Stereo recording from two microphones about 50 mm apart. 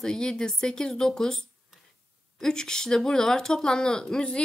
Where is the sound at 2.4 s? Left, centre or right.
Centre.